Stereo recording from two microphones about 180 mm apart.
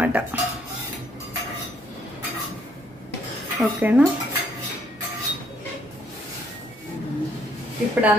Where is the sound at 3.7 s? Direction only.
5° right (ahead or behind).